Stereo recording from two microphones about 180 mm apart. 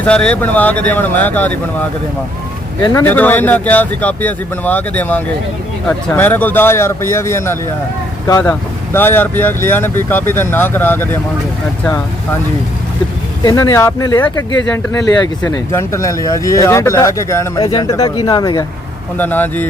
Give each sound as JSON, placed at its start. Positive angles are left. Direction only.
{"t": 0.0, "sound": "speech", "side_deg": 5}
{"t": 13.4, "sound": "speech", "side_deg": 20}
{"t": 19.1, "sound": "speech", "side_deg": 10}